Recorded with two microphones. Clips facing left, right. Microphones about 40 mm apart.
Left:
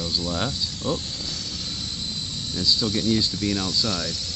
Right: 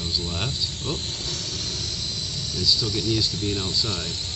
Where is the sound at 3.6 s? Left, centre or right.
Right.